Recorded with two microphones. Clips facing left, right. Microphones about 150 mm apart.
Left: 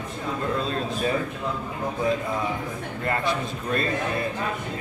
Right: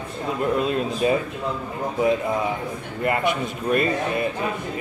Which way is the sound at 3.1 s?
15° right (ahead or behind).